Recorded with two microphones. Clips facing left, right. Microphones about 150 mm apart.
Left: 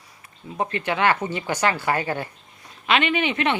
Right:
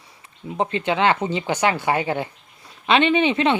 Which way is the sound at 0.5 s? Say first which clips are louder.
Right 3 dB; 20° right (ahead or behind).